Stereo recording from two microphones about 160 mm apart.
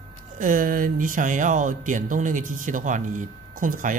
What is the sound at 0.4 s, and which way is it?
Speech, 60° right (ahead or behind).